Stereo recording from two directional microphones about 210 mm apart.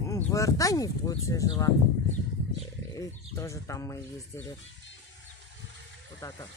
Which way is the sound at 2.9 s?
15° left (ahead or behind).